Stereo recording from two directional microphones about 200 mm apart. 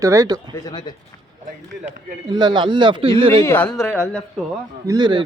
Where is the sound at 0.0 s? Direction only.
15° right (ahead or behind).